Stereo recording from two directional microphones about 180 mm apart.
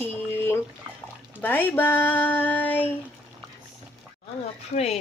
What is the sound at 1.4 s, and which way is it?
Speech, 10° left (ahead or behind).